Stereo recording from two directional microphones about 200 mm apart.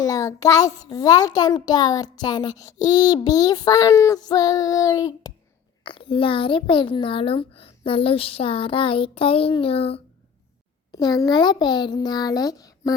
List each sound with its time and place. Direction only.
0.0 s a child's voice: 15° left (ahead or behind)
10.9 s a child's voice: 20° left (ahead or behind)